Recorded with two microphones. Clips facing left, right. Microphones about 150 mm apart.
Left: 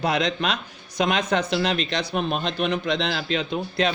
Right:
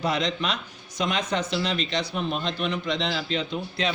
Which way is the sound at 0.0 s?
65° left (ahead or behind).